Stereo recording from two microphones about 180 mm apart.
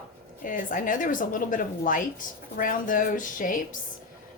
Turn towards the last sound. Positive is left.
turn(degrees=50)  # may be behind; listen again after turning